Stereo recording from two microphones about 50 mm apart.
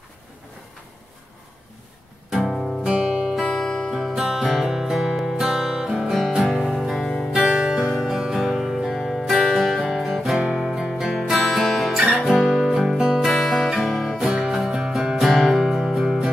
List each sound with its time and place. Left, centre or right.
2.4 s music: centre
2.9 s music: centre
3.4 s music: centre
4.1 s music: centre
8.9 s music: centre
11.1 s music: centre
12.2 s guitar: centre
13.2 s music: centre
14.1 s music: centre
15.2 s music: centre